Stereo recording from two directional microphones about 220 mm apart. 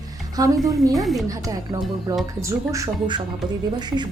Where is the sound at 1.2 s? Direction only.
15° right (ahead or behind).